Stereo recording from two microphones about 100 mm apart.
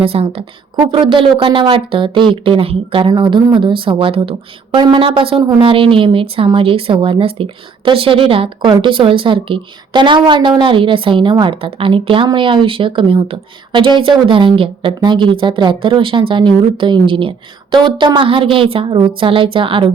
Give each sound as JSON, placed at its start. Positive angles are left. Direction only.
{"t": 0.0, "sound": "a woman's voice", "side_deg": -75}
{"t": 0.8, "sound": "speech", "side_deg": -55}
{"t": 3.1, "sound": "speech", "side_deg": -50}
{"t": 5.4, "sound": "a woman's voice", "side_deg": -45}
{"t": 5.6, "sound": "speech", "side_deg": -60}